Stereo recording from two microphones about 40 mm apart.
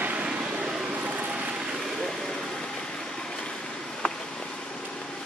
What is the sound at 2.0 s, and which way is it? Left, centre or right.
Vehicle, centre.